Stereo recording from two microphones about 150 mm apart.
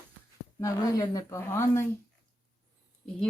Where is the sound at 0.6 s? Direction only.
25° left (ahead or behind).